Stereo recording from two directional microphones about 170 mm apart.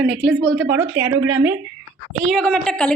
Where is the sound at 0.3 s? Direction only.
90° right.